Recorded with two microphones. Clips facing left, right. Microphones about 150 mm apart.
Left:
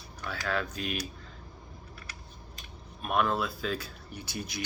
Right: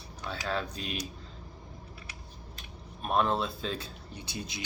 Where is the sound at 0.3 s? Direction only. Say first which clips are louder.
Left 1 dB; 25° right (ahead or behind).